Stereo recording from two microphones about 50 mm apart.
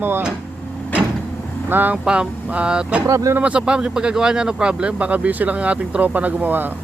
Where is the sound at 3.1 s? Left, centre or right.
Right.